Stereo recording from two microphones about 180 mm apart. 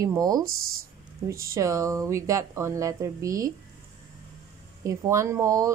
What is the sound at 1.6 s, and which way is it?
Speech, 20° right (ahead or behind).